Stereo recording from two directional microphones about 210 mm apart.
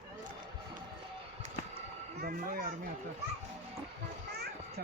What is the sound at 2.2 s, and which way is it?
Children playing, 45° right (ahead or behind).